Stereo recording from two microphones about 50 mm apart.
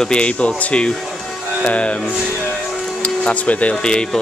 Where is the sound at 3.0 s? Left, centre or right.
Left.